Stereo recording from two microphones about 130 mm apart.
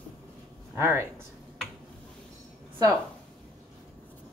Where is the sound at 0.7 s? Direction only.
20° right (ahead or behind).